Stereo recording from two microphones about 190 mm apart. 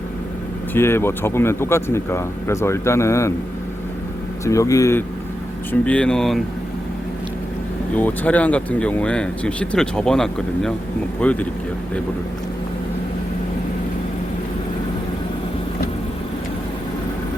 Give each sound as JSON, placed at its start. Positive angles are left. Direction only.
{"t": 0.7, "sound": "speech", "side_deg": 10}
{"t": 4.4, "sound": "speech", "side_deg": 15}
{"t": 7.9, "sound": "speech", "side_deg": 10}